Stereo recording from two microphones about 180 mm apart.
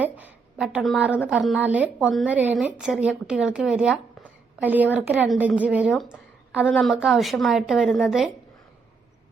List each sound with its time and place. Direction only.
0.0 s a sound: 10° right (ahead or behind)
1.3 s a woman's voice: 5° right (ahead or behind)
6.7 s a woman's voice: 5° left (ahead or behind)